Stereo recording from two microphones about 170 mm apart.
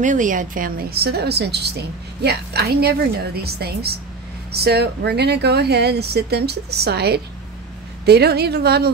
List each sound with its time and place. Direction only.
0.0 s a woman's voice: 50° right (ahead or behind); by 8.9 s 70° right (ahead or behind)